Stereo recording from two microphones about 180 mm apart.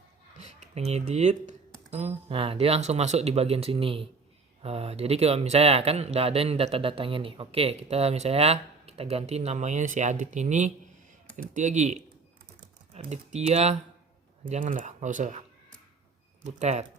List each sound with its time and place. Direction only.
0.3 s speech: 40° right (ahead or behind)
16.4 s speech: 40° right (ahead or behind)